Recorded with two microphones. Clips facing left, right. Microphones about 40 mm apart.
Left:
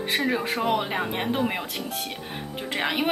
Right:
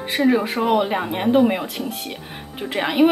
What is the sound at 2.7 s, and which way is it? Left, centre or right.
Speech, centre.